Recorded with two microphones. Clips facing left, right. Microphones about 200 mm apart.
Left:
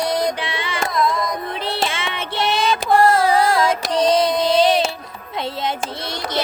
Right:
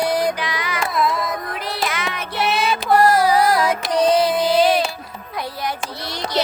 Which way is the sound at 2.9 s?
25° left (ahead or behind).